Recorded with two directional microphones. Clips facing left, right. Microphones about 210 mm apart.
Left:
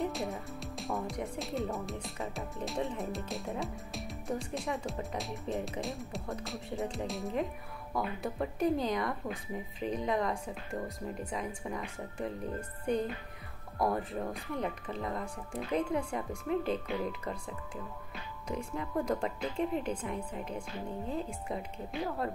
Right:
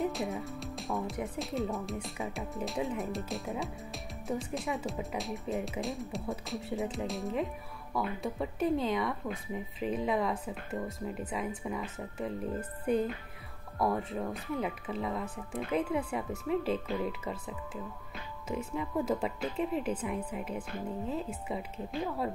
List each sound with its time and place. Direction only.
0.0 s speech: centre (ahead or behind)